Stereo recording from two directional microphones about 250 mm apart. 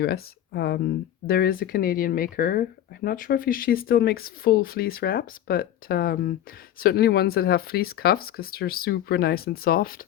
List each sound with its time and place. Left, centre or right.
0.0 s speech: left